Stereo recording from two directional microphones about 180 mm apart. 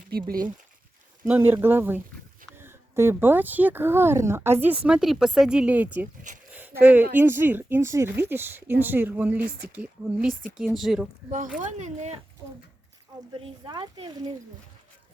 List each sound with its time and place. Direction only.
0.1 s speech: 55° right (ahead or behind)
1.2 s speech: 10° right (ahead or behind)
6.5 s a sound: 10° right (ahead or behind)
7.1 s speech: 10° right (ahead or behind)
11.8 s speech: 40° right (ahead or behind)
13.4 s speech: 25° right (ahead or behind)